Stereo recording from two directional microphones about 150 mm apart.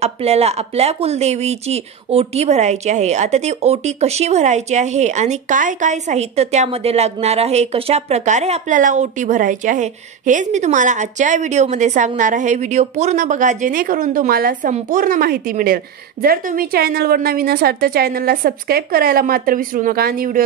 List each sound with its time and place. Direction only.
0.0 s a woman's voice: 45° right (ahead or behind); by 20.4 s 70° right (ahead or behind)